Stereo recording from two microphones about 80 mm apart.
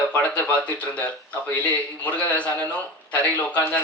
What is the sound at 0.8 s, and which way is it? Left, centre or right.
Speech, centre.